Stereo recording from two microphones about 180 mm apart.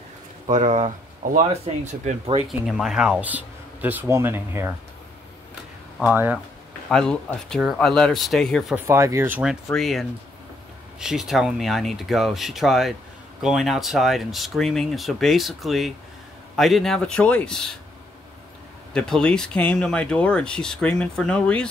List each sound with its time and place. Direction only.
0.5 s speech: 40° right (ahead or behind)
2.6 s speech: centre (ahead or behind)
6.0 s speech: 10° right (ahead or behind)
6.9 s speech: 5° left (ahead or behind)
8.7 s speech: 15° right (ahead or behind); by 17.7 s centre (ahead or behind)
18.9 s speech: 5° left (ahead or behind)